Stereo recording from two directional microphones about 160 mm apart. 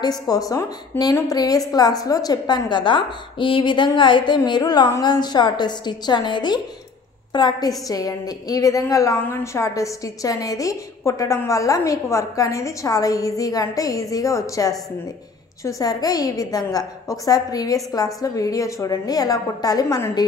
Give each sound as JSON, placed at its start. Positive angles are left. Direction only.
{"t": 0.0, "sound": "a woman's voice", "side_deg": 25}